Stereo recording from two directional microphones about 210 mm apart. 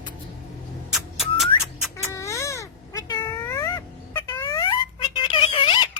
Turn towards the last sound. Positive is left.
turn(degrees=25)  # may be behind; listen again after turning